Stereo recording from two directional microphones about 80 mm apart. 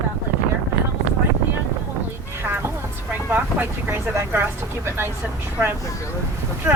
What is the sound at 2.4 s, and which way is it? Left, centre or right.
Vehicle, right.